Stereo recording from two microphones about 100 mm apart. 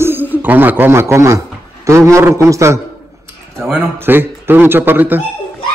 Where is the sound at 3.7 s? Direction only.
20° right (ahead or behind).